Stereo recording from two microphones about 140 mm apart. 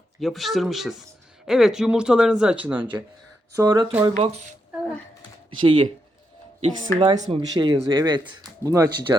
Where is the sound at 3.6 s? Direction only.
30° right (ahead or behind).